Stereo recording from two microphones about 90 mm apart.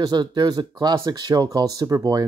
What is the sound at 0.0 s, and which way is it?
Speech, 50° right (ahead or behind).